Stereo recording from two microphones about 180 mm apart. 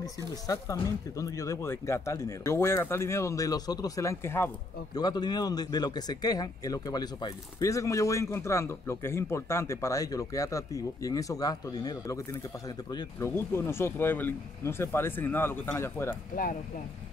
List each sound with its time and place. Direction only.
0.5 s speech: 20° left (ahead or behind)